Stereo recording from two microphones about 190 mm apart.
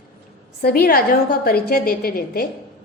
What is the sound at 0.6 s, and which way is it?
A woman's voice, 55° left (ahead or behind).